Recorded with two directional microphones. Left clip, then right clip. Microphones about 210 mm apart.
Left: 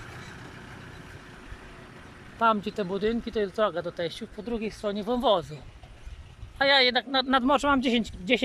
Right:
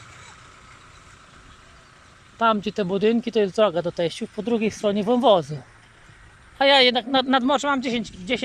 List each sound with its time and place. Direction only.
0.0 s vehicle: 50° left (ahead or behind)
2.4 s speech: centre (ahead or behind)
6.6 s speech: 5° right (ahead or behind); by 8.4 s 15° left (ahead or behind)